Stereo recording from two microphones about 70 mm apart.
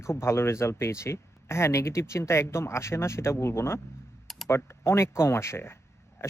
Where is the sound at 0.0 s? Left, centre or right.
Left.